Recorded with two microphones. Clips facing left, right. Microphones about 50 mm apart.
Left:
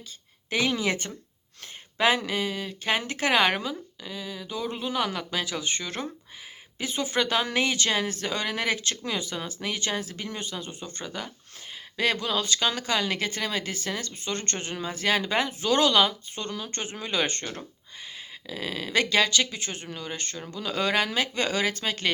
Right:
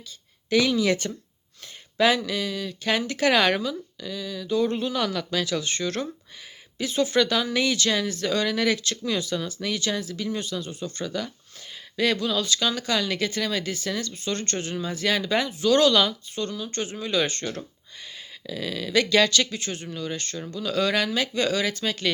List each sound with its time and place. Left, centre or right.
0.7 s speech: left
4.5 s speech: centre
5.0 s speech: left
18.4 s speech: left
19.2 s speech: left